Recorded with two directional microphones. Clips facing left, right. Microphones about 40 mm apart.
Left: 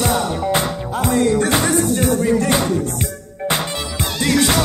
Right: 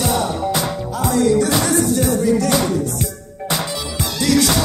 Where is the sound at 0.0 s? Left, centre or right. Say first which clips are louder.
Even; left.